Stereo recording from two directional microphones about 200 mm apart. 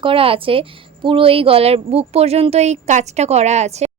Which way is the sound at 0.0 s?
25° right (ahead or behind).